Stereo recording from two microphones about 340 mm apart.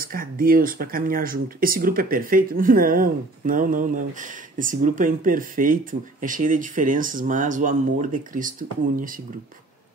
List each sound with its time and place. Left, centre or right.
0.0 s speech: right